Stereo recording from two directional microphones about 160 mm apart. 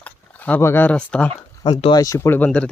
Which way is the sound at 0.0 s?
10° left (ahead or behind).